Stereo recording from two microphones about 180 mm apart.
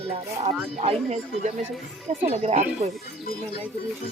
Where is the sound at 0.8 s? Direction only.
40° right (ahead or behind).